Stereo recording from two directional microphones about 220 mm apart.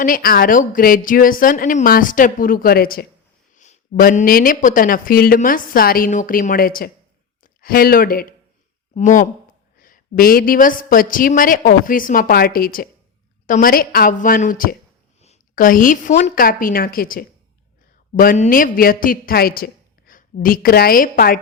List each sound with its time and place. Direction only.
0.0 s a woman's voice: 40° left (ahead or behind)